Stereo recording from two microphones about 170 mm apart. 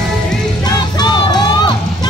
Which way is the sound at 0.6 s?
25° left (ahead or behind).